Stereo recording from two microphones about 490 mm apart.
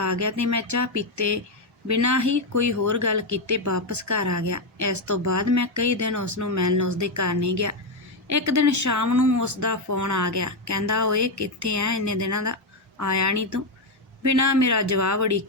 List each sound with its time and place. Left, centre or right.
0.0 s speech: right